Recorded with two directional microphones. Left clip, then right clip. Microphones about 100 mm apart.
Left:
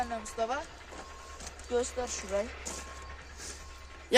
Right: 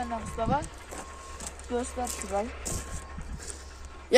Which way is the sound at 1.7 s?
40° left (ahead or behind).